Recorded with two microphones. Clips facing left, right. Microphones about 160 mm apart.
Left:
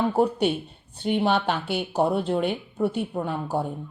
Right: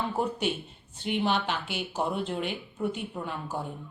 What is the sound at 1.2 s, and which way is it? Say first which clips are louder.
Speech: left 4 dB; 55° left (ahead or behind).